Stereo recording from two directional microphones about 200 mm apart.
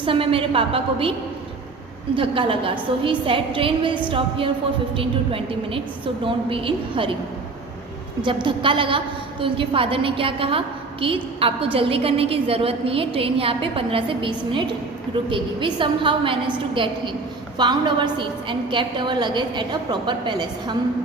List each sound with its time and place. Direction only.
0.0 s a woman's voice: 25° right (ahead or behind)
2.1 s a woman's voice: 25° right (ahead or behind)
8.2 s a woman's voice: 25° right (ahead or behind)